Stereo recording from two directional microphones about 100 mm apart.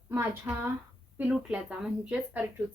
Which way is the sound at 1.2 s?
10° right (ahead or behind).